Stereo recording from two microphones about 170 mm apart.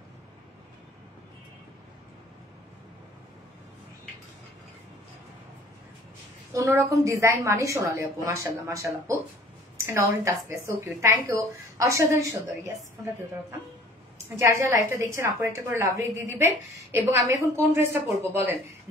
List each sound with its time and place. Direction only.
6.5 s a woman's voice: 15° right (ahead or behind)
14.3 s a woman's voice: 15° right (ahead or behind)